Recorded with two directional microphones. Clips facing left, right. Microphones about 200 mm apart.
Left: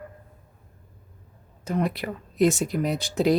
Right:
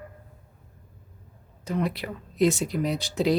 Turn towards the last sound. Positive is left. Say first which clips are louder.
# left 2 dB
turn(degrees=50)  # may be behind; listen again after turning